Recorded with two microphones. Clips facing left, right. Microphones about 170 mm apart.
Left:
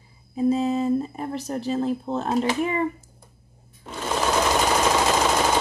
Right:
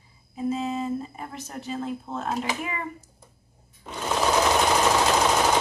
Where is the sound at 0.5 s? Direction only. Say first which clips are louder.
Left 6 dB; 35° left (ahead or behind).